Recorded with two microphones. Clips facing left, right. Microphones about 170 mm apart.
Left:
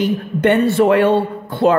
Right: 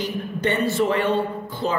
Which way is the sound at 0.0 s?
60° left (ahead or behind).